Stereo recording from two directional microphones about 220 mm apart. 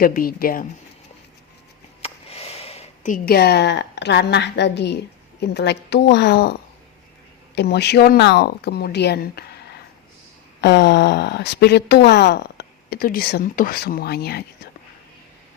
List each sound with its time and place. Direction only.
0.0 s a woman's voice: 40° left (ahead or behind)
2.0 s a sound: 25° left (ahead or behind); by 4.9 s 50° left (ahead or behind)
5.4 s speech: 50° left (ahead or behind)
10.6 s speech: 50° left (ahead or behind)